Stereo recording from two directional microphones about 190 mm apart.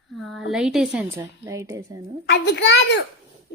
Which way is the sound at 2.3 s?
65° left (ahead or behind).